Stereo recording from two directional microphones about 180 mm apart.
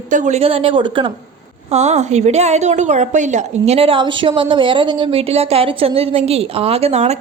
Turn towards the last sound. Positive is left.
turn(degrees=-35)  # may be behind; listen again after turning